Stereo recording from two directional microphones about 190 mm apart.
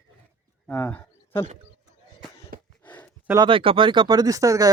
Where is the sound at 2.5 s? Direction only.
45° right (ahead or behind).